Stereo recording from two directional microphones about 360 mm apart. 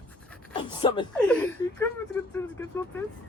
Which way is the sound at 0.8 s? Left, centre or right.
Centre.